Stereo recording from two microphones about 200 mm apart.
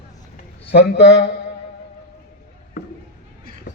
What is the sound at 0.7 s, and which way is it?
Speech, 55° left (ahead or behind).